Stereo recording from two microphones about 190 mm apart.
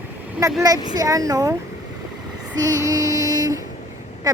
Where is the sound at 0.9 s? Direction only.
20° right (ahead or behind).